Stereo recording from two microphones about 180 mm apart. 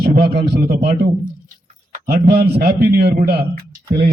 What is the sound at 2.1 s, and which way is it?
Speech, 65° right (ahead or behind).